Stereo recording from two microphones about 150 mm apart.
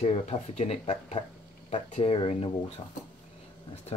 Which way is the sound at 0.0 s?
45° left (ahead or behind).